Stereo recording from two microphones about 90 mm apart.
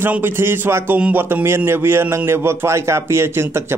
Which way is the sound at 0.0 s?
25° right (ahead or behind).